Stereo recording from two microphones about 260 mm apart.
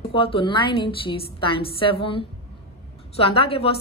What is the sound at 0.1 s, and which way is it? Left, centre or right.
A woman's voice, left.